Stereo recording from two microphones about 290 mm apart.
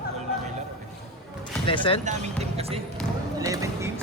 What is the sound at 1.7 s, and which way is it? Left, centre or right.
Speech, centre.